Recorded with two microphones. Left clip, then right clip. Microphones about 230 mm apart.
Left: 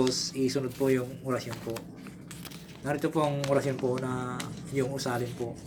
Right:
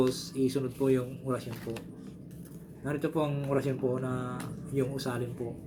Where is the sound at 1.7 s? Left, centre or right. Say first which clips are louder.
Left 2 dB; left.